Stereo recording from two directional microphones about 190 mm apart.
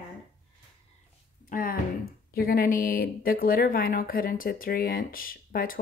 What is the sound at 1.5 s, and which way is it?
Speech, 50° left (ahead or behind).